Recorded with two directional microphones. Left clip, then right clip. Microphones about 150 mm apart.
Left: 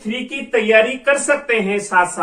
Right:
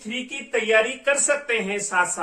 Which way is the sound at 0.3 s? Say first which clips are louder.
Left 6 dB; 15° right (ahead or behind).